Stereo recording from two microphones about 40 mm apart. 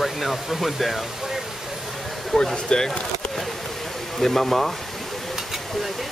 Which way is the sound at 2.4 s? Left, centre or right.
Centre.